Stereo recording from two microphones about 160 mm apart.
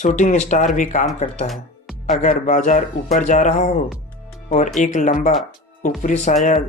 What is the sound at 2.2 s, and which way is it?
Speech, 50° left (ahead or behind).